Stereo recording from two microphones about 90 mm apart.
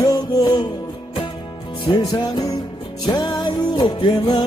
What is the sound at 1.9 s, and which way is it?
Music, 60° left (ahead or behind).